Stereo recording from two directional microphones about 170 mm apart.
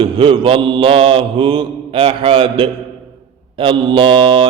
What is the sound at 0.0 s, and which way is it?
Mantra, 30° right (ahead or behind).